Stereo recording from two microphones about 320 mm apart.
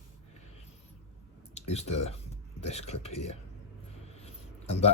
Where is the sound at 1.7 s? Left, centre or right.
Centre.